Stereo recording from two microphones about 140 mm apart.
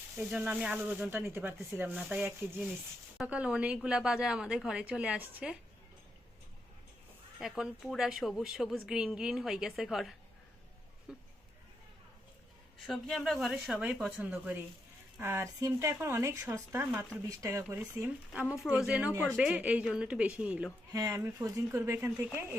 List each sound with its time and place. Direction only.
0.2 s speech: 10° right (ahead or behind)
7.3 s speech: centre (ahead or behind)
12.8 s speech: centre (ahead or behind)
20.9 s speech: 25° right (ahead or behind)